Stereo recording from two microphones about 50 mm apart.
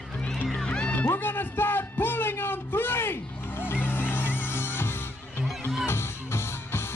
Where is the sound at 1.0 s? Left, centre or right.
Left.